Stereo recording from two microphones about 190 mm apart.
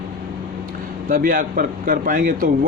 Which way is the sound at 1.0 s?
45° right (ahead or behind).